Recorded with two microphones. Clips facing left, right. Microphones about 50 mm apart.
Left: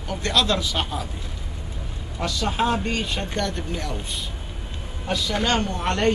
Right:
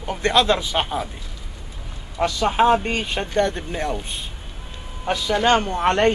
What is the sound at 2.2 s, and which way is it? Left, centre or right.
Speech, right.